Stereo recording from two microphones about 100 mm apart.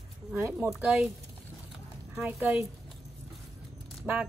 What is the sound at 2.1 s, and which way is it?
Speech, 5° right (ahead or behind).